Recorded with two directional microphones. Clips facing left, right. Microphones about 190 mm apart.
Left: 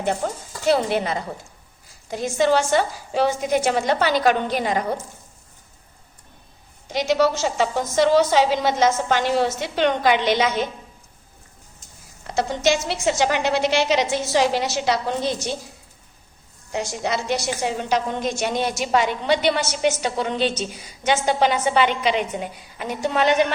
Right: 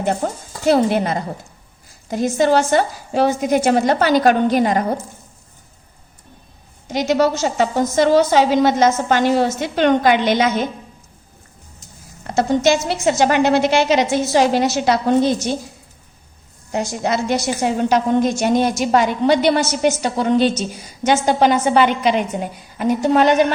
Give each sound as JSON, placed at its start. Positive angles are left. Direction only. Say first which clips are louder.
{"t": 0.0, "sound": "a woman's voice", "louder": "right 3 dB", "side_deg": -45}
{"t": 6.9, "sound": "a woman's voice", "louder": "right 3 dB", "side_deg": -50}
{"t": 12.4, "sound": "a woman's voice", "louder": "right 5 dB", "side_deg": -50}
{"t": 16.7, "sound": "a woman's voice", "louder": "right 5 dB", "side_deg": -50}